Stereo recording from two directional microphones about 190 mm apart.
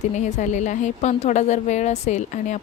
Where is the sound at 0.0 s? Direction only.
40° left (ahead or behind).